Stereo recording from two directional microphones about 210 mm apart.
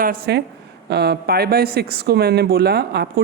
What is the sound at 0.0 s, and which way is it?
Speech, 45° right (ahead or behind).